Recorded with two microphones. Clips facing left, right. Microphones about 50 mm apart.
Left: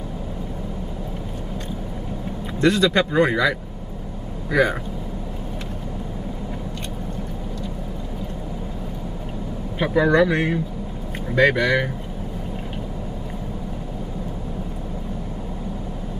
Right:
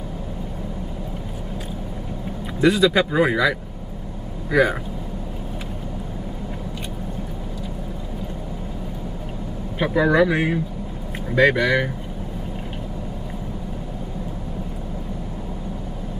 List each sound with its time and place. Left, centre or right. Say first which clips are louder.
2.6 s speech: right 1 dB; centre
9.8 s speech: even; centre